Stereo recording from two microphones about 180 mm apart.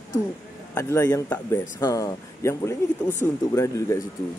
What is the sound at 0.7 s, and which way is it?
Speech, 15° left (ahead or behind).